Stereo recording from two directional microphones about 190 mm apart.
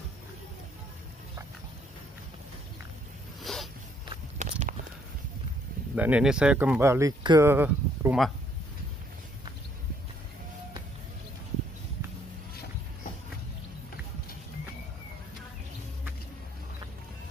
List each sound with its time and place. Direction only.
3.5 s a sound: centre (ahead or behind)
4.4 s walk: 40° right (ahead or behind)
5.9 s speech: 5° right (ahead or behind)